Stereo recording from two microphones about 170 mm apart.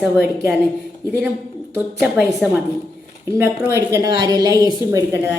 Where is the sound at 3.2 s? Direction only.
15° right (ahead or behind).